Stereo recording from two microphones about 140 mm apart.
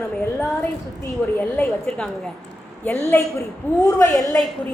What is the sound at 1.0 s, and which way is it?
Speech, 15° left (ahead or behind).